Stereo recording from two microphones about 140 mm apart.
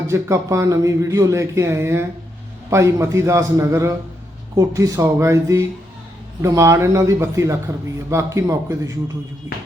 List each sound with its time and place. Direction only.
0.1 s speech: 20° right (ahead or behind)